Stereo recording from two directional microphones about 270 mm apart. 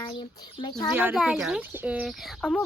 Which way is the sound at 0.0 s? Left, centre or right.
Centre.